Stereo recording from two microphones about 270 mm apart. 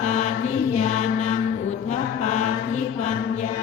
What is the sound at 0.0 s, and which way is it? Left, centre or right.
Mantra, left.